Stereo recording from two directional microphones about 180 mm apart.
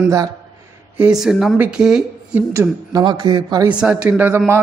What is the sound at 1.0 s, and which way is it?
Speech, 5° right (ahead or behind).